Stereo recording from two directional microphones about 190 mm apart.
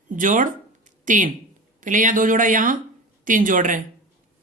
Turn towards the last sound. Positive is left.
turn(degrees=-45)  # may be behind; listen again after turning